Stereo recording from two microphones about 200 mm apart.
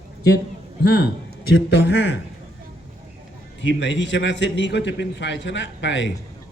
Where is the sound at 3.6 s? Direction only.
65° left (ahead or behind).